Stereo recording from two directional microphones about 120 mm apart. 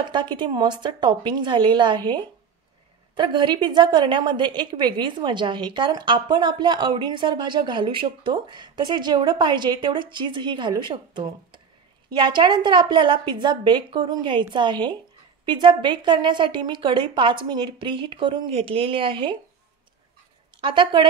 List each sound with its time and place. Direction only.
0.1 s a woman's voice: 40° right (ahead or behind)
20.6 s a woman's voice: 40° right (ahead or behind)